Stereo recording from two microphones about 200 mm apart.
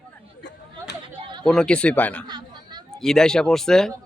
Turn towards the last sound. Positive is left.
turn(degrees=0)  # may be behind; listen again after turning